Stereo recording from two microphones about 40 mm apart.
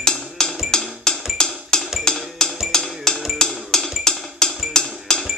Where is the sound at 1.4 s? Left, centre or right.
Centre.